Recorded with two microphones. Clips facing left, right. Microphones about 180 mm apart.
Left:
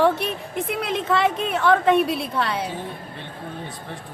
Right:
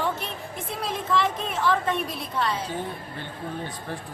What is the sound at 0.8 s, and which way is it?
A woman's voice, 70° left (ahead or behind).